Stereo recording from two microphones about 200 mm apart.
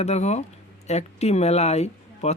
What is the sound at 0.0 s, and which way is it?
Speech, 35° left (ahead or behind).